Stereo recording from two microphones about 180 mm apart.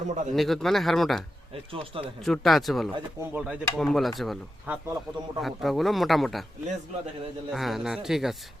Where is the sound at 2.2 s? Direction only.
Centre (ahead or behind).